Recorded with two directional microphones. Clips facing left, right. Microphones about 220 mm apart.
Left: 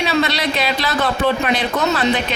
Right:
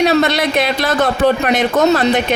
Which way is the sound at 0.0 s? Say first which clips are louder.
Right 5 dB; 45° right (ahead or behind).